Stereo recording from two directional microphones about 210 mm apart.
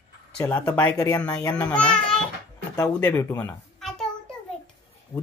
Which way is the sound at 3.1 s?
10° left (ahead or behind).